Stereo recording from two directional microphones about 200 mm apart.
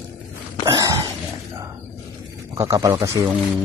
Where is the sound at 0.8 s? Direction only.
20° right (ahead or behind).